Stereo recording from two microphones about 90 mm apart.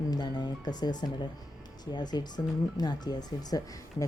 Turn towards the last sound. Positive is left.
turn(degrees=45)  # may be behind; listen again after turning